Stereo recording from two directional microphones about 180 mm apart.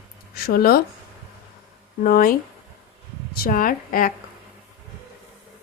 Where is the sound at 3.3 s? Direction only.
50° left (ahead or behind).